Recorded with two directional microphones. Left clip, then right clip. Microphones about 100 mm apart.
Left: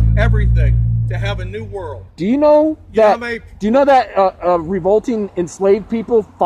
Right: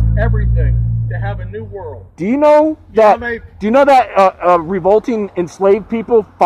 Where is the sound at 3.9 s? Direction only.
5° right (ahead or behind).